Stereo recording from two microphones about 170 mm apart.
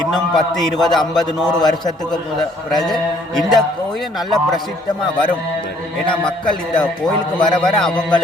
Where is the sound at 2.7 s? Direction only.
Centre (ahead or behind).